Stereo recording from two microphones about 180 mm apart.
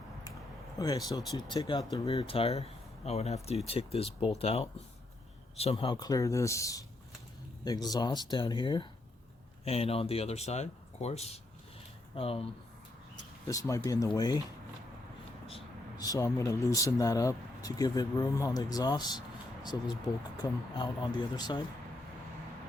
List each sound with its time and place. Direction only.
0.8 s speech: 20° left (ahead or behind)
13.5 s speech: 20° left (ahead or behind)
16.0 s speech: 20° left (ahead or behind)
20.4 s speech: 25° left (ahead or behind)